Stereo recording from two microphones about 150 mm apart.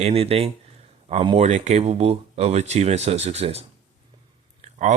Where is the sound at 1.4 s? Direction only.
50° right (ahead or behind).